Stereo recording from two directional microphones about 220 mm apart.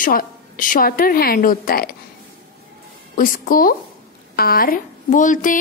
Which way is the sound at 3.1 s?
40° left (ahead or behind).